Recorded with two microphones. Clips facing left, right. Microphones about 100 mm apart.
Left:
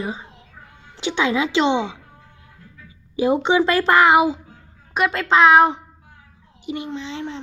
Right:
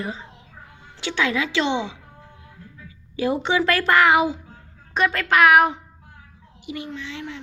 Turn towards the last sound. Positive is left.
turn(degrees=30)  # may be behind; listen again after turning